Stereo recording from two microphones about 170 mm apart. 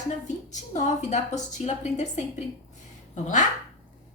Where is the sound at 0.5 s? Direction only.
45° left (ahead or behind).